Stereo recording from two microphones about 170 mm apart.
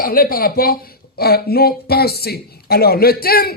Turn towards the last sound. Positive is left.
turn(degrees=60)  # may be behind; listen again after turning